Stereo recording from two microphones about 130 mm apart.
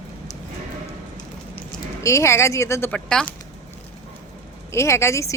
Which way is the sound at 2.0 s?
25° left (ahead or behind).